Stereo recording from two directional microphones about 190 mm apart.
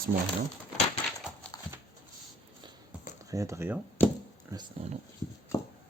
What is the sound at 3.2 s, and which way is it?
Speech, 15° right (ahead or behind).